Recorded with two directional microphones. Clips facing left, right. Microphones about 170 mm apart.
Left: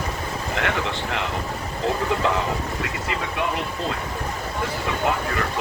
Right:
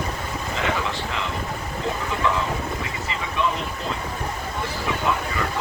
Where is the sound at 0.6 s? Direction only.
70° left (ahead or behind).